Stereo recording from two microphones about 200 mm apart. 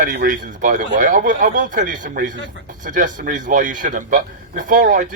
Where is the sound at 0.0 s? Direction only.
45° right (ahead or behind).